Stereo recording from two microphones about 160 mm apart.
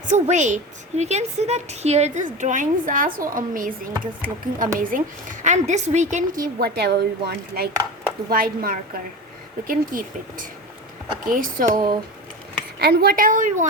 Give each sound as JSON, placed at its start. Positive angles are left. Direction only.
{"t": 0.1, "sound": "a woman's voice", "side_deg": -50}
{"t": 6.6, "sound": "speech", "side_deg": -90}
{"t": 8.3, "sound": "a woman's voice", "side_deg": -65}
{"t": 12.8, "sound": "a woman's voice", "side_deg": -80}